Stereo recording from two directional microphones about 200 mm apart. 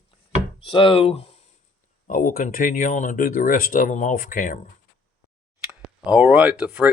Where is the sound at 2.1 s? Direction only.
45° left (ahead or behind).